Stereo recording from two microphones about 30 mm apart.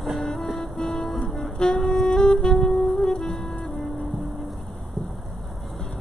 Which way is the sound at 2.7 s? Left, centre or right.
Centre.